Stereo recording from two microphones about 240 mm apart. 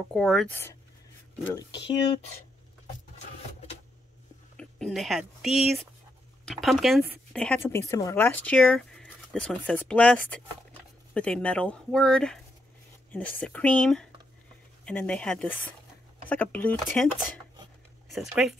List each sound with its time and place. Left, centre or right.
0.1 s speech: centre; by 2.3 s left
4.6 s speech: centre